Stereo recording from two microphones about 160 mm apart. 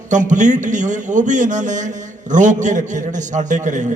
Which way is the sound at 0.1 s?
50° right (ahead or behind).